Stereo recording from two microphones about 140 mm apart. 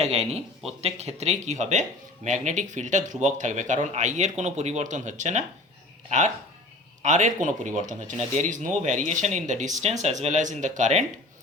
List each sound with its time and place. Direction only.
0.0 s speech: 50° right (ahead or behind)